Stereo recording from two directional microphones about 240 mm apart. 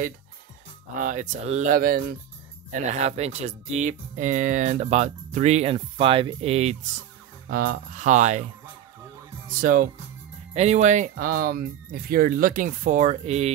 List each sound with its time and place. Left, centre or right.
0.9 s speech: right
7.4 s speech: right
9.5 s speech: right